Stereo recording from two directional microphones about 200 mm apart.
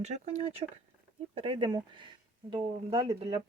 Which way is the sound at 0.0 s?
35° right (ahead or behind).